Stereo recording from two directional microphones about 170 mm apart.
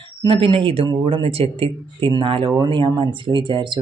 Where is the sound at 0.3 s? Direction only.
30° right (ahead or behind).